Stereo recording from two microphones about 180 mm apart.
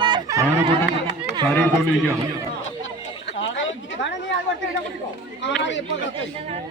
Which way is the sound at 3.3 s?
90° left.